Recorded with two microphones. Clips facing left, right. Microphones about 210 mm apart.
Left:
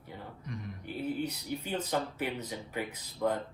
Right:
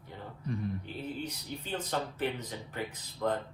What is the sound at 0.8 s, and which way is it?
Speech, 10° left (ahead or behind).